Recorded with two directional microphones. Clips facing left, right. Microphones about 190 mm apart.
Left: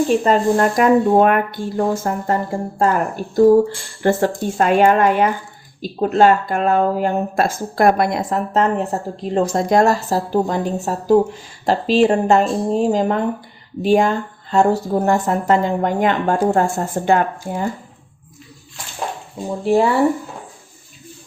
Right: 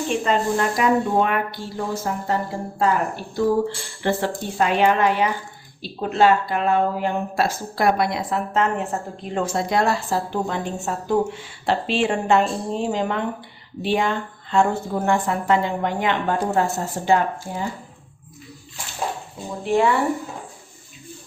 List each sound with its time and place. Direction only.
0.1 s speech: 45° left (ahead or behind)
19.6 s speech: 35° left (ahead or behind)